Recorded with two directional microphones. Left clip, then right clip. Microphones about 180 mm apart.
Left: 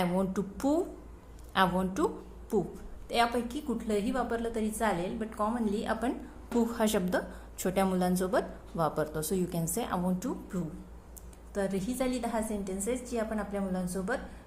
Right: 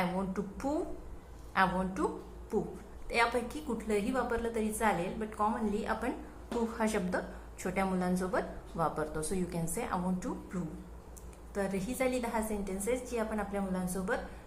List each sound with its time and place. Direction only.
0.0 s a woman's voice: 45° left (ahead or behind)
3.1 s a woman's voice: 35° left (ahead or behind)